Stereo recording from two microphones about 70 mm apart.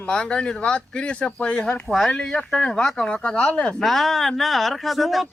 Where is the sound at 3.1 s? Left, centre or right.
Centre.